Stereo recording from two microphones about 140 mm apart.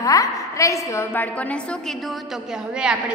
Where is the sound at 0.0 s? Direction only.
25° left (ahead or behind); by 2.1 s 5° left (ahead or behind).